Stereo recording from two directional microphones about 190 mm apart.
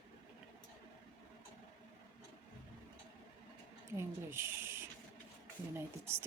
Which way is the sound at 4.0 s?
15° right (ahead or behind).